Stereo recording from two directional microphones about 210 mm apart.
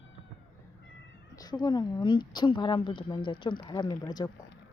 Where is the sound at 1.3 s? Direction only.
20° left (ahead or behind).